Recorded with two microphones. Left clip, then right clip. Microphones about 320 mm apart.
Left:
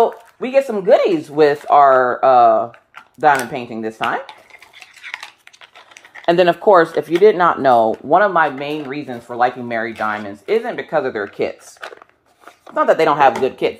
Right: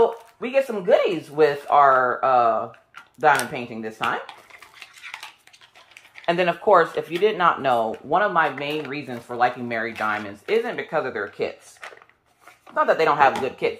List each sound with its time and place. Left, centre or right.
0.0 s speech: centre
5.0 s a sound: centre
6.2 s speech: left
12.7 s speech: left